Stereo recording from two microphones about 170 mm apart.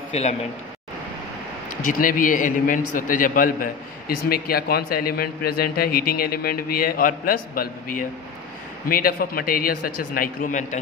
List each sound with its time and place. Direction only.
0.1 s a man's voice: 40° left (ahead or behind)
1.9 s a man's voice: 55° left (ahead or behind)